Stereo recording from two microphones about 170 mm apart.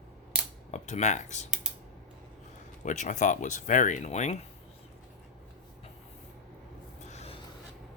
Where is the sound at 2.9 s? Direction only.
45° left (ahead or behind).